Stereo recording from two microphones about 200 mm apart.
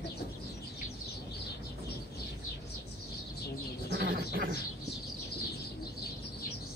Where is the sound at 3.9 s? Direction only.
50° right (ahead or behind).